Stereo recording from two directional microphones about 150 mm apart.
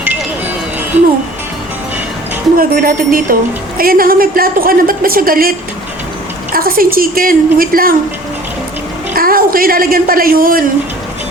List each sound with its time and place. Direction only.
2.6 s a woman's voice: 70° right (ahead or behind)
9.1 s a woman's voice: 75° right (ahead or behind)